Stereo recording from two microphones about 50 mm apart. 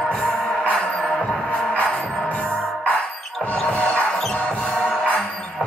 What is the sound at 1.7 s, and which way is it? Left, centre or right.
Music, left.